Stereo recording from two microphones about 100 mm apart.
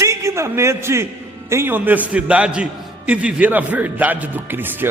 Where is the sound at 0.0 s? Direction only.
30° right (ahead or behind).